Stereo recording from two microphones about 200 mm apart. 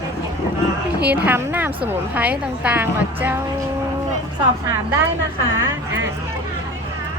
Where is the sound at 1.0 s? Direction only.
10° right (ahead or behind).